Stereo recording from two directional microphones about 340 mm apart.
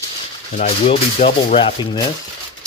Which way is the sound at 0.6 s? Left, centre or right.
Centre.